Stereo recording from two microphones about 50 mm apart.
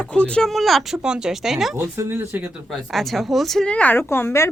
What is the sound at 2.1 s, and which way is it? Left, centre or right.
Speech, right.